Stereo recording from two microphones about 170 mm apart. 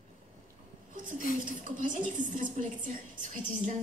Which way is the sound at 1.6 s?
50° right (ahead or behind).